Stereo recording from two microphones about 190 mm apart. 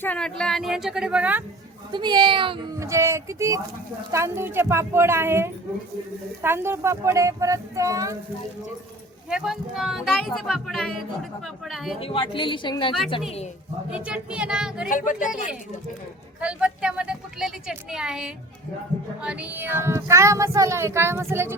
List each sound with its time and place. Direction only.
0.0 s speech: 5° left (ahead or behind)
1.9 s speech: 25° right (ahead or behind)
2.7 s speech: 15° right (ahead or behind)
9.3 s speech: centre (ahead or behind)
11.9 s speech: 30° left (ahead or behind)
13.9 s speech: 5° right (ahead or behind)
14.8 s speech: 45° left (ahead or behind)
16.4 s speech: 5° right (ahead or behind)